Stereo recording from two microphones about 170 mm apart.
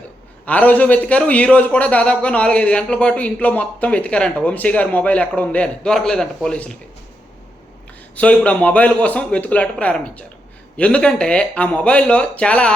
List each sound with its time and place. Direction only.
0.4 s a man's voice: 10° left (ahead or behind)
8.1 s a man's voice: 10° left (ahead or behind)